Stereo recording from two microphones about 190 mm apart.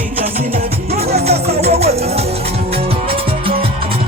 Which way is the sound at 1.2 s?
35° right (ahead or behind).